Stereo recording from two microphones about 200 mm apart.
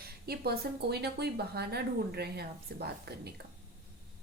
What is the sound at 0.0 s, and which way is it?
Speech, 50° right (ahead or behind).